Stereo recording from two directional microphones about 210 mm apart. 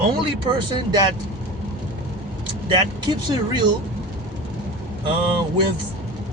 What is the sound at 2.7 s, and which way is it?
Speech, 20° right (ahead or behind).